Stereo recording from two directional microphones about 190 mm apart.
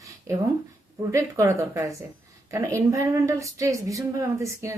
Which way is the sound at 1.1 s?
15° right (ahead or behind).